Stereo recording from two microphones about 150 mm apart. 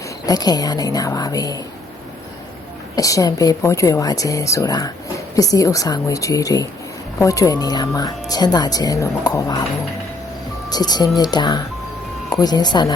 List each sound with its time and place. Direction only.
0.3 s speech: 25° left (ahead or behind)
2.9 s speech: 25° left (ahead or behind)
10.7 s speech: 25° left (ahead or behind)